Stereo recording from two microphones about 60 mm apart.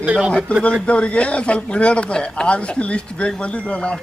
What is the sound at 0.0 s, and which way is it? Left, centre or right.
Speech, centre.